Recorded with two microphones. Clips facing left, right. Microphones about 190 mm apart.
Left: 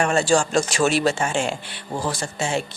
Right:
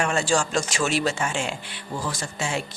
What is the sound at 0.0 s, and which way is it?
Speech, 35° left (ahead or behind).